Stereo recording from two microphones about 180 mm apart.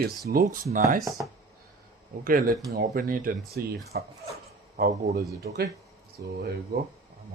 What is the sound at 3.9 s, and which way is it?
Speech, 65° right (ahead or behind).